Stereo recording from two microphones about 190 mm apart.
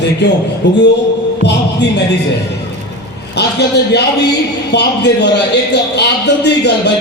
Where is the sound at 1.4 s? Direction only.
65° left (ahead or behind).